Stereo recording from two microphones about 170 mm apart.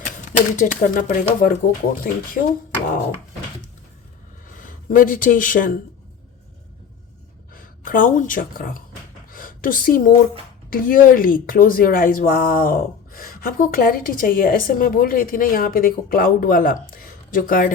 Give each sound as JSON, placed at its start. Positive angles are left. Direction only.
{"t": 0.0, "sound": "speech", "side_deg": 50}
{"t": 4.4, "sound": "speech", "side_deg": 55}
{"t": 7.5, "sound": "speech", "side_deg": 55}
{"t": 9.3, "sound": "a sound", "side_deg": 55}
{"t": 10.7, "sound": "speech", "side_deg": 55}